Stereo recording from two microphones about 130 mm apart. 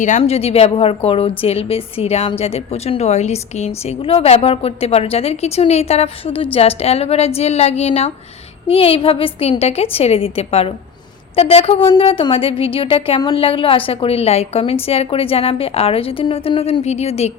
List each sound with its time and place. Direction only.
0.2 s a woman's voice: 50° left (ahead or behind)